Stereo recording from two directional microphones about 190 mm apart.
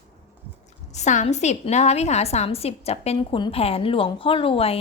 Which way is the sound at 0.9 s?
40° left (ahead or behind).